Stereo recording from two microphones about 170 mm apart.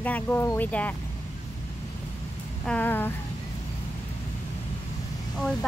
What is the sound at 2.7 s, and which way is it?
Speech, 10° left (ahead or behind).